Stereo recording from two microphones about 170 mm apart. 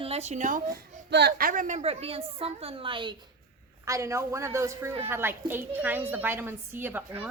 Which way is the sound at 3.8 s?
15° right (ahead or behind).